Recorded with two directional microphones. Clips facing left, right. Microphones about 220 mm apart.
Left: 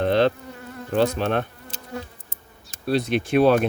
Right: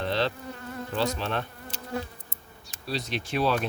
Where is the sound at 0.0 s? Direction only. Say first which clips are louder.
Left 9 dB; 50° left (ahead or behind).